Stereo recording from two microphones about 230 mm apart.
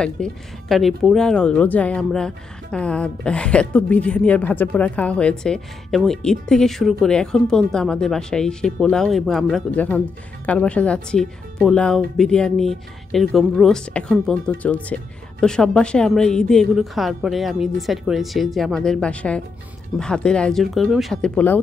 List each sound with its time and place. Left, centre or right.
0.0 s speech: centre